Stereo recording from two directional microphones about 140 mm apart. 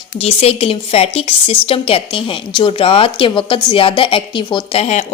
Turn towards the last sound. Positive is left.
turn(degrees=50)  # may be behind; listen again after turning